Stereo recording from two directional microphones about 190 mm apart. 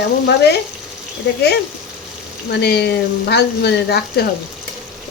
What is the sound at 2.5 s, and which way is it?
Speech, 60° left (ahead or behind).